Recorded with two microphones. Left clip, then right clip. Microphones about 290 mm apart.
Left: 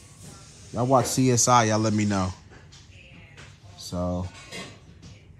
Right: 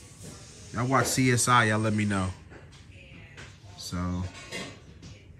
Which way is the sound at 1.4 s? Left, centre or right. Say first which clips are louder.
Left 3 dB; centre.